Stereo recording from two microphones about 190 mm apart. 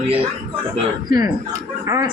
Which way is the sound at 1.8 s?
15° right (ahead or behind).